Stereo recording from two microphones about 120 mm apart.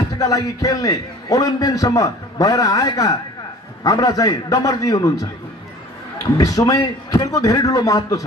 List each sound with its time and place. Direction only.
0.2 s a man's voice: 30° left (ahead or behind)
6.3 s a man's voice: 30° left (ahead or behind)